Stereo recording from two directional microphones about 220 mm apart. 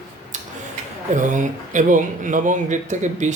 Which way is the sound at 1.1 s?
35° right (ahead or behind).